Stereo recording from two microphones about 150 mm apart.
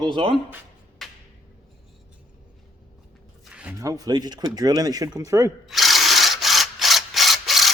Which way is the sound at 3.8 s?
25° right (ahead or behind).